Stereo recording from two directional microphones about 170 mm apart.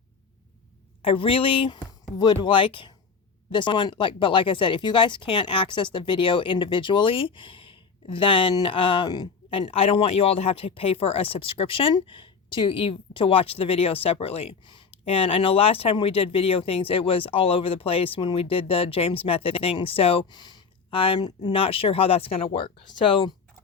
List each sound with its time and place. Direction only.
1.0 s speech: 30° left (ahead or behind)